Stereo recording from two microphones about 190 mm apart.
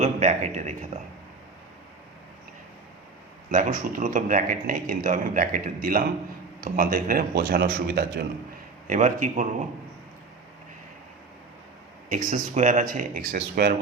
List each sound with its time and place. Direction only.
0.0 s a man's voice: 40° right (ahead or behind)
3.5 s speech: 45° right (ahead or behind)
8.9 s a man's voice: 40° right (ahead or behind)
12.0 s speech: 45° right (ahead or behind)